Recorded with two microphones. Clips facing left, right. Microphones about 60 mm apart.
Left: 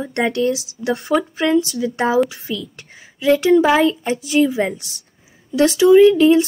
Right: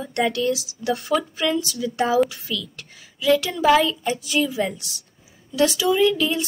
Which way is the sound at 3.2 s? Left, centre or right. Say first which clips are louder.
Left 7 dB; left.